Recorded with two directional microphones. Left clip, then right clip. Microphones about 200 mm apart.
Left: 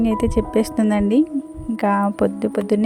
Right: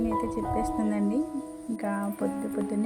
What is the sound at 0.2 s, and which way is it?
Speech, 45° left (ahead or behind).